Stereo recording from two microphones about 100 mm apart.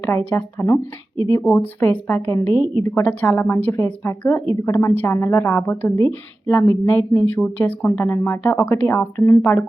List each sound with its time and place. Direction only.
0.1 s speech: 25° left (ahead or behind)